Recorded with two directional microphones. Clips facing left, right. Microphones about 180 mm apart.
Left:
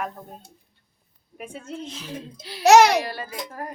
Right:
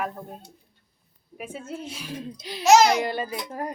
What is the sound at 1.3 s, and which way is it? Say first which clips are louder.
A woman's voice: even; 5° right (ahead or behind).